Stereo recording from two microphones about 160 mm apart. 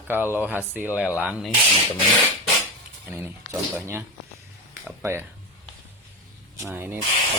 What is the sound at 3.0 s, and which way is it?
Speech, 15° right (ahead or behind).